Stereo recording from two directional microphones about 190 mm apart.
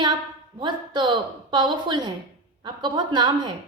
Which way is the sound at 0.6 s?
25° right (ahead or behind).